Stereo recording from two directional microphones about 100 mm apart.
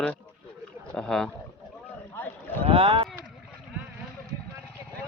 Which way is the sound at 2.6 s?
70° right (ahead or behind).